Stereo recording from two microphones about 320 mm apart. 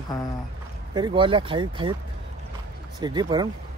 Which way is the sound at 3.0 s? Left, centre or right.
Centre.